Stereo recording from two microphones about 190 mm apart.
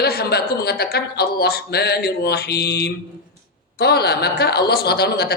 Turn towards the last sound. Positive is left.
turn(degrees=60)  # may be behind; listen again after turning